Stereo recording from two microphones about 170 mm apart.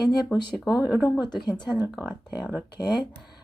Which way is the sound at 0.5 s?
5° right (ahead or behind).